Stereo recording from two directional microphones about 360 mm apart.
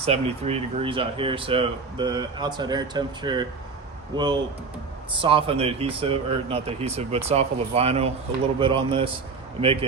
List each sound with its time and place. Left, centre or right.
0.0 s speech: centre